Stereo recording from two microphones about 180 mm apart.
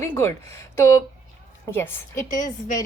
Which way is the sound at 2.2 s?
45° left (ahead or behind).